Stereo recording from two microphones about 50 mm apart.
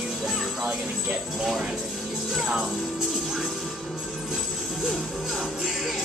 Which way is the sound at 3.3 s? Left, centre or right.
Centre.